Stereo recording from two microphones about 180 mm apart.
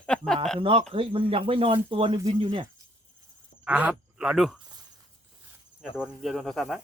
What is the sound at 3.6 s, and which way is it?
Speech, 5° right (ahead or behind).